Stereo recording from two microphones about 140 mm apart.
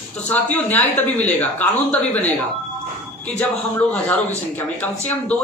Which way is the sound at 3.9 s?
10° left (ahead or behind).